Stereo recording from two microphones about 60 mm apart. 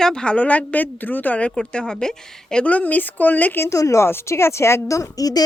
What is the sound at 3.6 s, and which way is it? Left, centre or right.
Speech, left.